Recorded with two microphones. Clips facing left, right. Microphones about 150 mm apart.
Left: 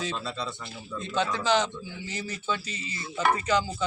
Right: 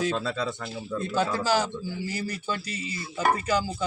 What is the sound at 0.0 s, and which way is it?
Speech, 50° right (ahead or behind).